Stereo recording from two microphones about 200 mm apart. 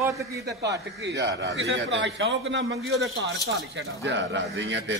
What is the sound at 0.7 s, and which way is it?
A man's voice, 60° right (ahead or behind).